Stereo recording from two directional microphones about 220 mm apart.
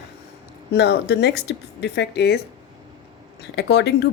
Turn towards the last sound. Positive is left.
turn(degrees=50)  # may be behind; listen again after turning